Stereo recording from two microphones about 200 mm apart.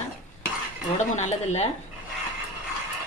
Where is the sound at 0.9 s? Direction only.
35° left (ahead or behind).